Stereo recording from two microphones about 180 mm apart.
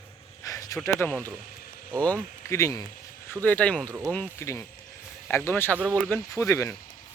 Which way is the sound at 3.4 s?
5° left (ahead or behind).